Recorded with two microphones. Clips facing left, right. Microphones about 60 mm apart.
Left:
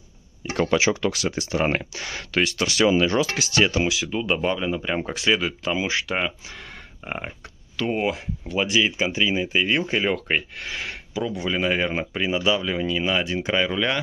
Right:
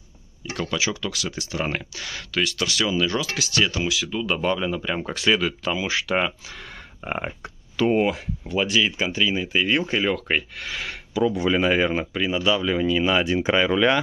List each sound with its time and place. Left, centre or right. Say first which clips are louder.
0.6 s speech: left 6 dB; left
1.6 s speech: left 3 dB; left
4.4 s speech: even; centre
7.1 s speech: right 3 dB; centre
11.9 s speech: right 1 dB; centre